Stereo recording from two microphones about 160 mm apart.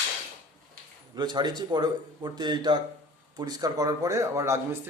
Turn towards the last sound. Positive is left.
turn(degrees=-20)  # may be behind; listen again after turning